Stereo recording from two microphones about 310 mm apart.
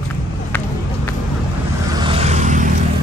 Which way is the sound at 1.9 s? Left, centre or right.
Centre.